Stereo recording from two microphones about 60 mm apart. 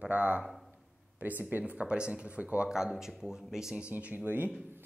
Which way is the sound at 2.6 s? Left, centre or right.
Centre.